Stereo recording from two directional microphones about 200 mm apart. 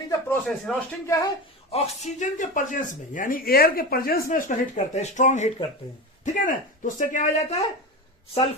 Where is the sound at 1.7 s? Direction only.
30° left (ahead or behind).